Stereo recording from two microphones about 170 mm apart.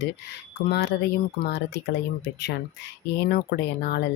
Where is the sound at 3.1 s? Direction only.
70° left (ahead or behind).